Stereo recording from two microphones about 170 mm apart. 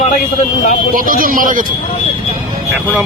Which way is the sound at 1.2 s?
55° right (ahead or behind).